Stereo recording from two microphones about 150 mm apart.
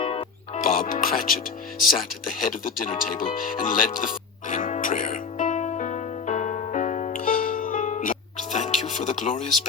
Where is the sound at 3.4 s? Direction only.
65° left (ahead or behind).